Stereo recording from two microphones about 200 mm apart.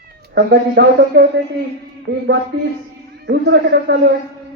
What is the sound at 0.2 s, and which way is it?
Speech, 55° right (ahead or behind).